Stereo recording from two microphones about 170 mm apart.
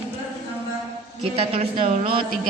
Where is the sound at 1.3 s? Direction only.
35° right (ahead or behind).